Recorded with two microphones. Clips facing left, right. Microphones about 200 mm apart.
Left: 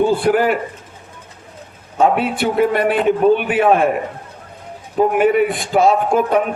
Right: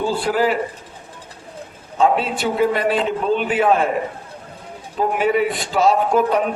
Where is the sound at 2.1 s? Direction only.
60° left (ahead or behind).